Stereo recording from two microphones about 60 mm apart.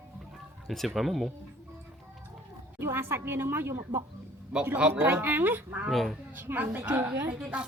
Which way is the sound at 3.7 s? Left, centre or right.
Right.